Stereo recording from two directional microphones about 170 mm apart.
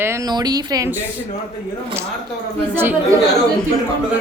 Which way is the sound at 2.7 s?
10° right (ahead or behind).